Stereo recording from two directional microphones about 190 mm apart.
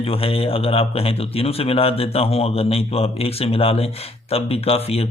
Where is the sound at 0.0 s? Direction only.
30° left (ahead or behind).